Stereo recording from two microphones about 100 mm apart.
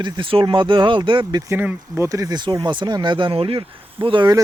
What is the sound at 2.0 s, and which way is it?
Speech, 35° right (ahead or behind).